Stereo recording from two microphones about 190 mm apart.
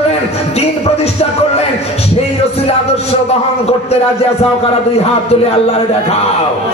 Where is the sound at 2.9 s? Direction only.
30° left (ahead or behind).